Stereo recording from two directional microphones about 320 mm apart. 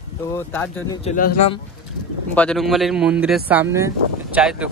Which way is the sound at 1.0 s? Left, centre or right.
Left.